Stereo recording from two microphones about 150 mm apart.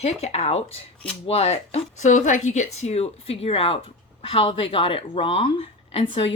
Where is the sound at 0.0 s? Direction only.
45° left (ahead or behind).